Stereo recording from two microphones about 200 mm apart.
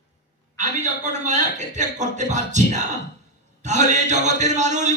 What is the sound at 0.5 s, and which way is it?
A man's voice, 35° right (ahead or behind).